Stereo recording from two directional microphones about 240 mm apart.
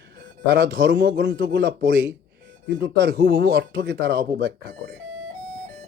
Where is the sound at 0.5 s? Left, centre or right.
Right.